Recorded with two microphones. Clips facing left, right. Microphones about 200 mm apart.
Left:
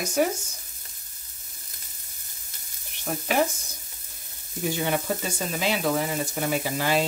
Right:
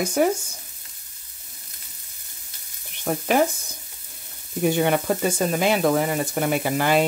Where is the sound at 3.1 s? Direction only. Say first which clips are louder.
Right 6 dB; 50° right (ahead or behind).